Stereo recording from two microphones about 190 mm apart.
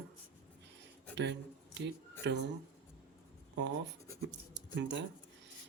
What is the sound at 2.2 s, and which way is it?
Speech, 65° right (ahead or behind).